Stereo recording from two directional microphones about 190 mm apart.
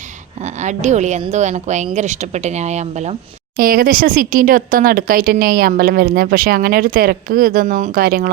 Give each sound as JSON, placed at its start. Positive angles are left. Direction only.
{"t": 0.4, "sound": "speech", "side_deg": -40}
{"t": 3.6, "sound": "speech", "side_deg": -50}